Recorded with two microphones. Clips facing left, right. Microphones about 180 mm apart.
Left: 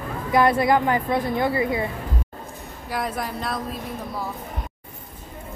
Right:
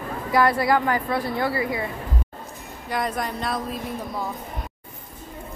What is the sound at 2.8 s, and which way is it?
Speech, 5° left (ahead or behind).